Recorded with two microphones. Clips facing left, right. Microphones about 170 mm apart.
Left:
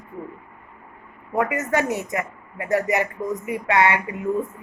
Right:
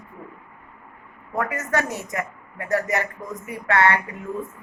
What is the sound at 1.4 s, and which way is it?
A woman's voice, 20° left (ahead or behind).